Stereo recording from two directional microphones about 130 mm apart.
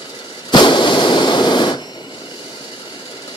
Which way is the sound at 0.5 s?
35° left (ahead or behind).